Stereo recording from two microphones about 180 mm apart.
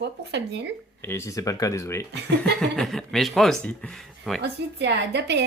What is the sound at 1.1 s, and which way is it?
Speech, 15° left (ahead or behind).